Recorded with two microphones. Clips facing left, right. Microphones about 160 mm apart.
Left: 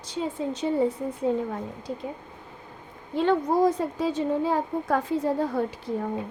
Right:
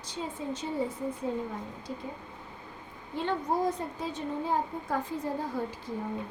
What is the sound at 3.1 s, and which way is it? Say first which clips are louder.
A woman's voice: left 8 dB; 90° left.